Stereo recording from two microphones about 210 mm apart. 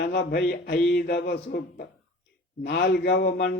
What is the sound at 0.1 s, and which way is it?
A man's voice, 50° left (ahead or behind).